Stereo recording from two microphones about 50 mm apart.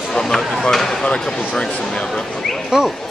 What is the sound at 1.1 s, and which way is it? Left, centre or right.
Speech, centre.